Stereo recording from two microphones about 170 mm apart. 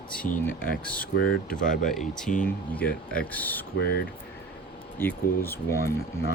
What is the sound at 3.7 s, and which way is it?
Speech, 70° left (ahead or behind).